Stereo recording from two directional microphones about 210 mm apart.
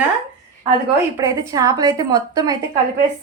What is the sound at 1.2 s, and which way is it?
A woman's voice, 15° right (ahead or behind).